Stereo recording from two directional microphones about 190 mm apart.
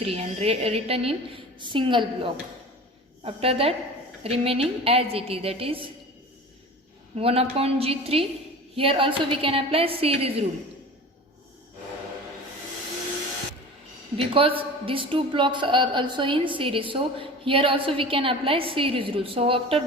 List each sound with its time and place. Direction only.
0.0 s a woman's voice: 30° right (ahead or behind)
3.2 s a woman's voice: 30° right (ahead or behind)
7.2 s a woman's voice: 30° right (ahead or behind)
14.2 s a woman's voice: 30° right (ahead or behind)